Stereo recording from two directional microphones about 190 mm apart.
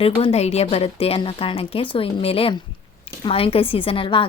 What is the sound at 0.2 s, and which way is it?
A woman's voice, 35° left (ahead or behind).